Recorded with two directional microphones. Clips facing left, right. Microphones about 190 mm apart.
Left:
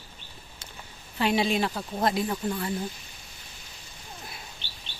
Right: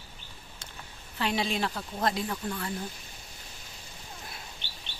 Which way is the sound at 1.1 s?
15° left (ahead or behind).